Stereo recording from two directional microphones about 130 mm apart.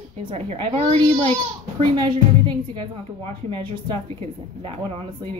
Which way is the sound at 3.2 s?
40° right (ahead or behind).